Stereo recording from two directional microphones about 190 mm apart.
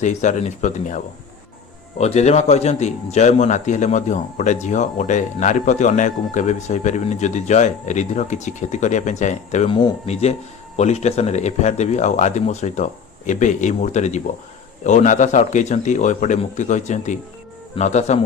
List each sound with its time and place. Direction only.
0.0 s speech: 40° left (ahead or behind)
9.6 s speech: 25° left (ahead or behind)